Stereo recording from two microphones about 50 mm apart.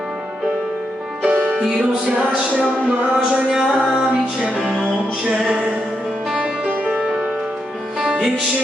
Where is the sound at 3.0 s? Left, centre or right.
Right.